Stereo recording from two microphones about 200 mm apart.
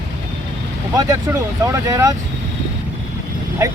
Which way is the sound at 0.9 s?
15° right (ahead or behind).